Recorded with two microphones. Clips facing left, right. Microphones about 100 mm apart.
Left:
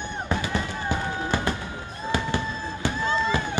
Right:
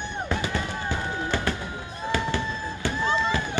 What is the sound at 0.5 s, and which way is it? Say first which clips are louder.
Music: left 1 dB; 15° left (ahead or behind).